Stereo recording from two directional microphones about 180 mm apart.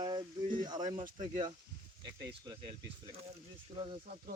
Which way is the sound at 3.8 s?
30° right (ahead or behind).